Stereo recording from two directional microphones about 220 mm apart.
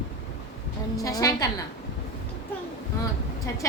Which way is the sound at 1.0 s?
15° left (ahead or behind).